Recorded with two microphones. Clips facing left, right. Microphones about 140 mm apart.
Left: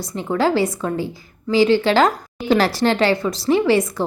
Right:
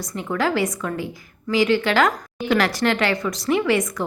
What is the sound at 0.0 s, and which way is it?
A woman's voice, 30° left (ahead or behind).